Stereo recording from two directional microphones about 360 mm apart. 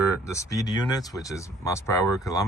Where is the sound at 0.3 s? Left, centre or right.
Centre.